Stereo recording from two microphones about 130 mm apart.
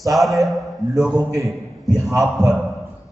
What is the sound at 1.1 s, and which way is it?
Speech, 25° right (ahead or behind).